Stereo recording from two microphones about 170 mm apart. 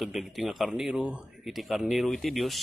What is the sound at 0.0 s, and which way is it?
Speech, centre (ahead or behind).